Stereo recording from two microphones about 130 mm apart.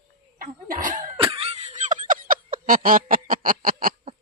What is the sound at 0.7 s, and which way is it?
Cough, 85° right.